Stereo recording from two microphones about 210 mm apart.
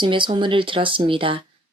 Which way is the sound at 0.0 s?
20° right (ahead or behind).